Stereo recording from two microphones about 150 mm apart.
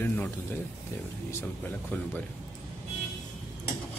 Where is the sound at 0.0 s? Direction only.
10° left (ahead or behind).